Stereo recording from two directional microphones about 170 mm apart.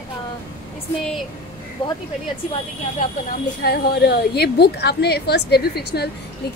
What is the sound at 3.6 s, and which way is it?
A woman's voice, 70° left (ahead or behind).